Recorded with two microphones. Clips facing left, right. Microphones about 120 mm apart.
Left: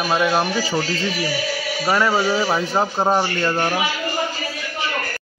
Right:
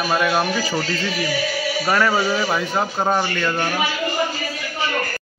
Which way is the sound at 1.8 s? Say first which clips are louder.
Left 1 dB; 15° left (ahead or behind).